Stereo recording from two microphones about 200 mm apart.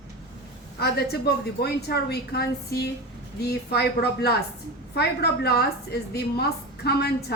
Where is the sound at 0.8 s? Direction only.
55° left (ahead or behind).